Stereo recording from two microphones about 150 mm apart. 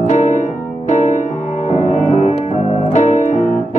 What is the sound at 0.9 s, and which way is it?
Music, 55° left (ahead or behind).